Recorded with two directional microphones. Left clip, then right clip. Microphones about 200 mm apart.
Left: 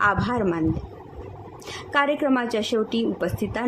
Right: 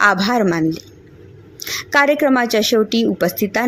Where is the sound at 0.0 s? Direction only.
20° right (ahead or behind).